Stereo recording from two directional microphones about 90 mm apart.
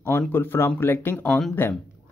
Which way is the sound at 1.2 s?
10° left (ahead or behind).